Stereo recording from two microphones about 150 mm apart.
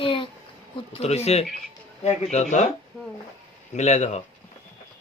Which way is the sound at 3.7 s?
50° left (ahead or behind).